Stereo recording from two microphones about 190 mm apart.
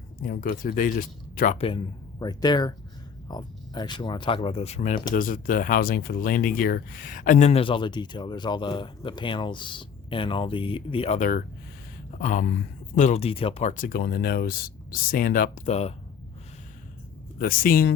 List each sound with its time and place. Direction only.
0.2 s speech: 50° left (ahead or behind)
1.5 s speech: 30° left (ahead or behind)
11.2 s speech: 45° left (ahead or behind)
17.3 s speech: 50° left (ahead or behind)